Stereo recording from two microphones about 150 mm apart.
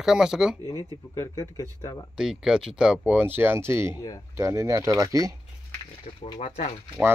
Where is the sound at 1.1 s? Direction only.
20° left (ahead or behind).